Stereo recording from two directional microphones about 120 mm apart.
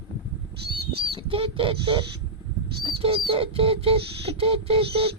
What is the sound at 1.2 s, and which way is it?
Bird, 50° right (ahead or behind).